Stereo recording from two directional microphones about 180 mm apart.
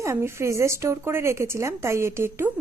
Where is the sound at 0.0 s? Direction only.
15° right (ahead or behind).